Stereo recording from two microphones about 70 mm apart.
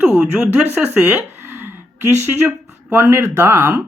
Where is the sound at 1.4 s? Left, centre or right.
Right.